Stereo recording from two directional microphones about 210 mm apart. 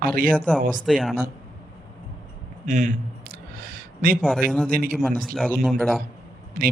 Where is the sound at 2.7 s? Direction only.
35° right (ahead or behind).